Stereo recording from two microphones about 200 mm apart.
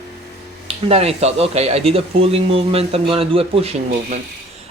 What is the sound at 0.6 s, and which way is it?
A man's voice, 30° right (ahead or behind).